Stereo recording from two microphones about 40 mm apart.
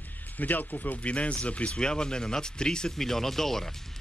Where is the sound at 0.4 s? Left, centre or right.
Left.